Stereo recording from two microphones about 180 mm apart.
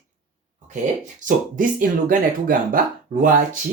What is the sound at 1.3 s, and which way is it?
Speech, 50° right (ahead or behind).